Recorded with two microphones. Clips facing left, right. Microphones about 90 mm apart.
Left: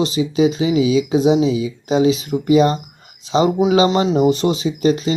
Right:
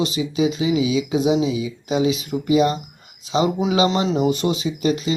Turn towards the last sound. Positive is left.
turn(degrees=35)  # may be behind; listen again after turning